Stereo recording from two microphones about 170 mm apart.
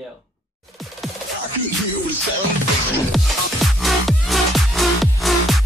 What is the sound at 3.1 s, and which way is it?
Music, centre (ahead or behind).